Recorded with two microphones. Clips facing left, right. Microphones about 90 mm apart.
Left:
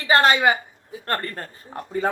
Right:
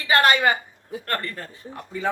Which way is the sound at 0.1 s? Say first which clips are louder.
Left 1 dB; 25° left (ahead or behind).